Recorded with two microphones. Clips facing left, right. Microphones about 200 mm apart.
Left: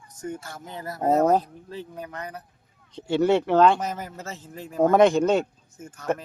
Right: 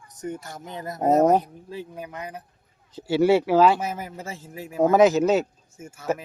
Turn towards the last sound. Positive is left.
turn(degrees=-5)  # may be behind; listen again after turning